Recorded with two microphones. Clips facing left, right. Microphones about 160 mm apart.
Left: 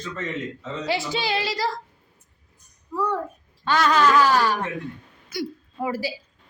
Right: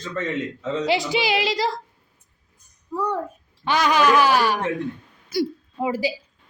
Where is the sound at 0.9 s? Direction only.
15° right (ahead or behind).